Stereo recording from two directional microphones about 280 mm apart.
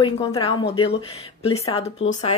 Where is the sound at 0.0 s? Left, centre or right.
Centre.